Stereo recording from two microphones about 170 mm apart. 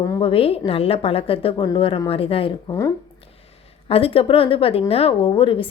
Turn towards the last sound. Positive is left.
turn(degrees=30)  # may be behind; listen again after turning